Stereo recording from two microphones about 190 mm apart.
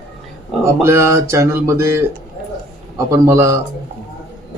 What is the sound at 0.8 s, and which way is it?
Speech, 15° right (ahead or behind).